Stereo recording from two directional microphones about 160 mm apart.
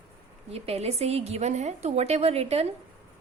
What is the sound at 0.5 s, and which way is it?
A woman's voice, 40° right (ahead or behind).